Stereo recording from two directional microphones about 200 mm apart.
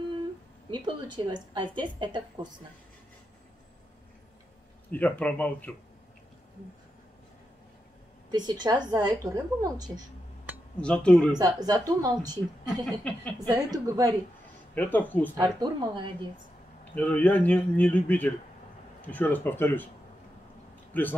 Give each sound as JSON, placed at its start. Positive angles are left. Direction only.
{"t": 0.7, "sound": "a woman's voice", "side_deg": -20}
{"t": 4.9, "sound": "a man's voice", "side_deg": 5}
{"t": 8.3, "sound": "a woman's voice", "side_deg": -20}
{"t": 10.8, "sound": "speech", "side_deg": 5}
{"t": 11.3, "sound": "a woman's voice", "side_deg": -20}
{"t": 12.8, "sound": "a man's voice", "side_deg": 5}
{"t": 13.7, "sound": "a woman's voice", "side_deg": -15}
{"t": 14.8, "sound": "a man's voice", "side_deg": 10}
{"t": 15.3, "sound": "a woman's voice", "side_deg": -20}
{"t": 16.9, "sound": "a man's voice", "side_deg": 10}
{"t": 20.9, "sound": "a man's voice", "side_deg": 10}